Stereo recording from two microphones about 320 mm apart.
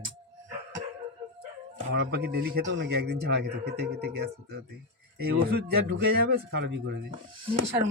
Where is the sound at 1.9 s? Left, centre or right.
Right.